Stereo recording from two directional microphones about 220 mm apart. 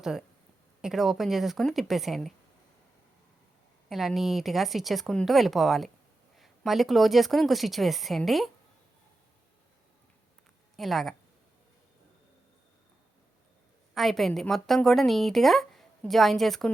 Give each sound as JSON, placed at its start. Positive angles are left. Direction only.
{"t": 0.0, "sound": "a woman's voice", "side_deg": 0}
{"t": 3.8, "sound": "a woman's voice", "side_deg": 0}
{"t": 10.8, "sound": "a woman's voice", "side_deg": 0}
{"t": 13.9, "sound": "a woman's voice", "side_deg": 0}